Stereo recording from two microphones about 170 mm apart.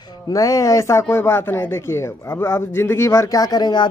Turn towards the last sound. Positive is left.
turn(degrees=25)  # may be behind; listen again after turning